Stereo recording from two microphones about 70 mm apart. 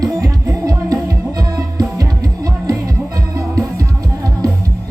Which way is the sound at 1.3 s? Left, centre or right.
Right.